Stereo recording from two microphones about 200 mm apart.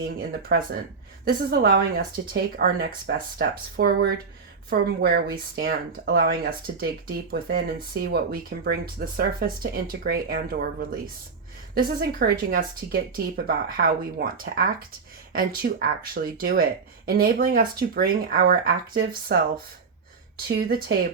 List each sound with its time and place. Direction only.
0.2 s speech: 50° right (ahead or behind)
20.5 s speech: 50° right (ahead or behind)